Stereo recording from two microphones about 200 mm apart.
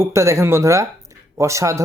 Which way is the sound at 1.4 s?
15° right (ahead or behind).